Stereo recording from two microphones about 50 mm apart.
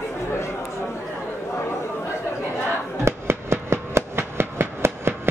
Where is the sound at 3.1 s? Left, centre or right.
Right.